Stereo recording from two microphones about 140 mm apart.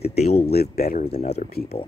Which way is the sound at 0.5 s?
90° left.